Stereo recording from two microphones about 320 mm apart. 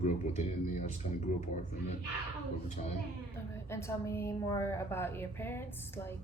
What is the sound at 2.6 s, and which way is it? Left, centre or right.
Speech, left.